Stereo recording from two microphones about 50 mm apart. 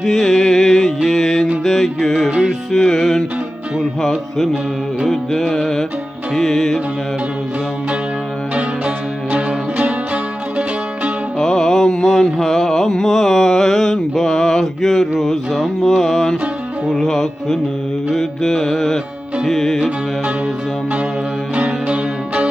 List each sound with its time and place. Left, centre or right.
0.0 s music: centre
5.0 s music: centre
9.3 s music: right
11.3 s music: centre
21.5 s music: right